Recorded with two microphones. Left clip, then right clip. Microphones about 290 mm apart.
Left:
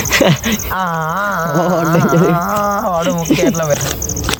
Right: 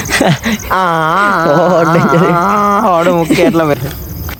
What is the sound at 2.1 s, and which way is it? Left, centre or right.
Dog, right.